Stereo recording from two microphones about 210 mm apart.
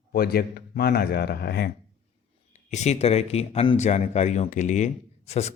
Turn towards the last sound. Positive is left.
turn(degrees=30)  # may be behind; listen again after turning